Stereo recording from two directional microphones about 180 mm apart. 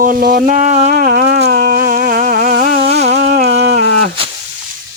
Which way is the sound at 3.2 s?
60° right (ahead or behind).